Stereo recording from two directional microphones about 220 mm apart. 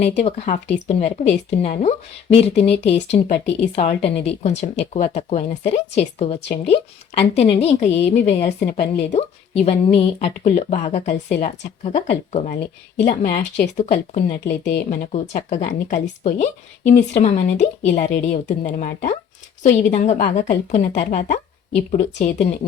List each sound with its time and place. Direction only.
0.0 s a woman's voice: 30° left (ahead or behind)